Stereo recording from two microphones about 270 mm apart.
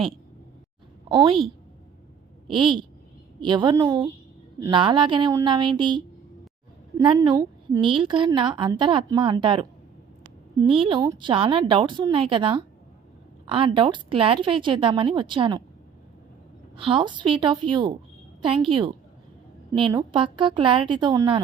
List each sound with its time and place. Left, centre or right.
1.0 s a woman's voice: centre
2.5 s a woman's voice: centre
16.7 s a woman's voice: centre